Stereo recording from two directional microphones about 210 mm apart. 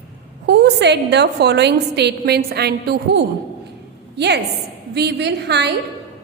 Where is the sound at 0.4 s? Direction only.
55° right (ahead or behind).